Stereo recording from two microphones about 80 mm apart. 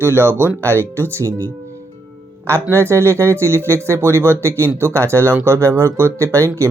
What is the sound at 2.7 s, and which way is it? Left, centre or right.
Speech, right.